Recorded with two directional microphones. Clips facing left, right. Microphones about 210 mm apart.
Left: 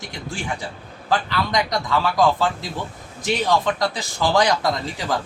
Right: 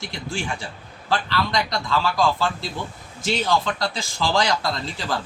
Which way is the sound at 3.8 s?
20° left (ahead or behind).